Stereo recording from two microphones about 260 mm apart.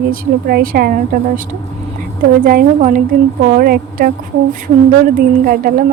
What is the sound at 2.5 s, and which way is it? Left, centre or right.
A woman's voice, right.